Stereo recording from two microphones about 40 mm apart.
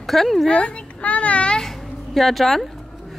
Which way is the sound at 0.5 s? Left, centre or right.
Left.